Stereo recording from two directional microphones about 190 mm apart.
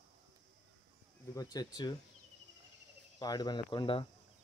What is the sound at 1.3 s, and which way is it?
Speech, 20° left (ahead or behind).